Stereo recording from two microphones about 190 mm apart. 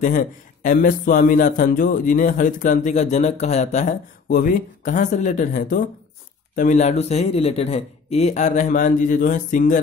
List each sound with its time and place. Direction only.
0.0 s a man's voice: 45° left (ahead or behind)